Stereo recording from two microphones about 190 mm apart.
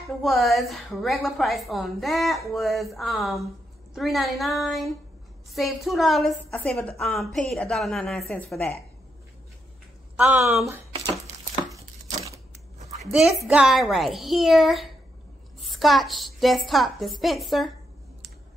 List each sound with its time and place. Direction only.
0.2 s a woman's voice: centre (ahead or behind)
10.1 s speech: 10° right (ahead or behind)
11.7 s chopping: 15° right (ahead or behind)
13.1 s a woman's voice: 5° right (ahead or behind)